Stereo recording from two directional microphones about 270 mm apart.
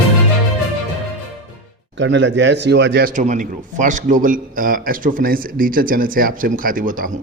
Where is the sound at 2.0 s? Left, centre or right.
Right.